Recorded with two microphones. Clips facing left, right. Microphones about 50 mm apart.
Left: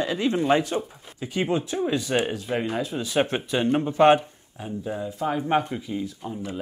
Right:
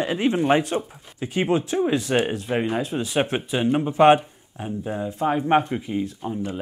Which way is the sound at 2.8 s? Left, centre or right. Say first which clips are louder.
Right 2 dB; right.